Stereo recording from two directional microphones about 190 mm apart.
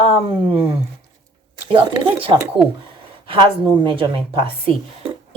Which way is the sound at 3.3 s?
25° right (ahead or behind).